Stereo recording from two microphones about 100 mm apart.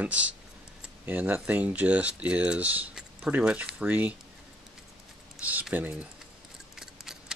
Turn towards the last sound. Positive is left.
turn(degrees=-5)  # may be behind; listen again after turning